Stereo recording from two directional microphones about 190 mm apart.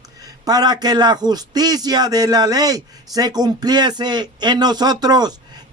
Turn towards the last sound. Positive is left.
turn(degrees=-20)  # may be behind; listen again after turning